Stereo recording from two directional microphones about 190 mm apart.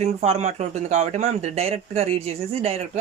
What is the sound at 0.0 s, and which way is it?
Speech, 35° right (ahead or behind).